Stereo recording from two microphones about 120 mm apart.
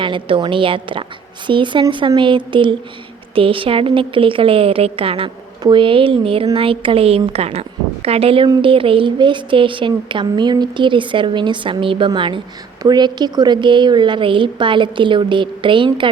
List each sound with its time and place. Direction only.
0.0 s a woman's voice: 45° right (ahead or behind)